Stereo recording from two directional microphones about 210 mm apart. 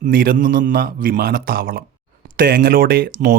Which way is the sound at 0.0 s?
45° right (ahead or behind).